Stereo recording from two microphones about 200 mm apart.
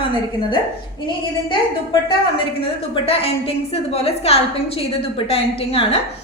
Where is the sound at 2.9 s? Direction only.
30° left (ahead or behind).